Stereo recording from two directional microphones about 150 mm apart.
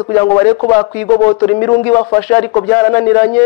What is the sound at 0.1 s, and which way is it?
Speech, 20° left (ahead or behind).